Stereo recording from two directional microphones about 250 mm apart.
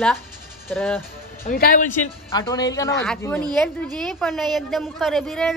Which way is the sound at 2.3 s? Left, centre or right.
Centre.